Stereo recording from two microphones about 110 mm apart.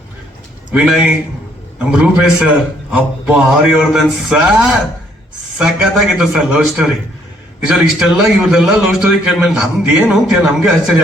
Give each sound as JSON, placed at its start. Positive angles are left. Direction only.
{"t": 0.7, "sound": "a man's voice", "side_deg": -10}